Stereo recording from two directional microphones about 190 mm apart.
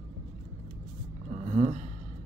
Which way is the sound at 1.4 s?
40° right (ahead or behind).